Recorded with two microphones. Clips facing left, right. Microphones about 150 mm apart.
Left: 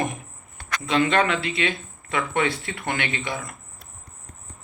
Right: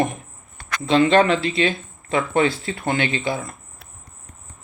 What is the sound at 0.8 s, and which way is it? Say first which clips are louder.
Speech: right 6 dB; 25° right (ahead or behind).